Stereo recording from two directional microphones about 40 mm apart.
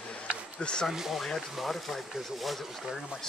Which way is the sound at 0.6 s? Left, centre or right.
Left.